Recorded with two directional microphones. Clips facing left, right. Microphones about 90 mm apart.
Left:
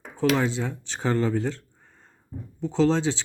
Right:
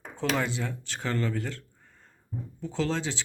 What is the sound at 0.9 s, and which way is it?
Speech, 25° left (ahead or behind).